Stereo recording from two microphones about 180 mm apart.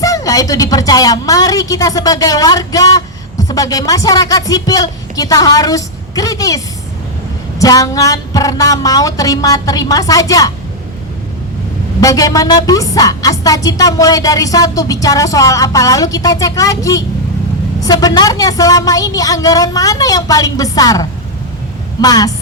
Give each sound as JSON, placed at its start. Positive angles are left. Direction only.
{"t": 0.0, "sound": "a woman's voice", "side_deg": 20}
{"t": 7.6, "sound": "a woman's voice", "side_deg": 20}
{"t": 11.9, "sound": "a woman's voice", "side_deg": 20}